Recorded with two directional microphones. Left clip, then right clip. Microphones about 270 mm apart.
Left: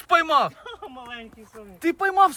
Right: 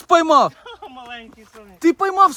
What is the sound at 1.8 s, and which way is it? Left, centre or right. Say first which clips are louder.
Speech: right 4 dB; right.